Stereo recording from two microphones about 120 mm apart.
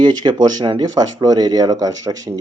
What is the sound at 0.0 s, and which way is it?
Speech, 35° right (ahead or behind).